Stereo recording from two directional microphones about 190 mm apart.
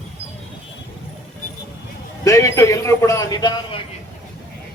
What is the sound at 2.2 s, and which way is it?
A man's voice, 15° left (ahead or behind).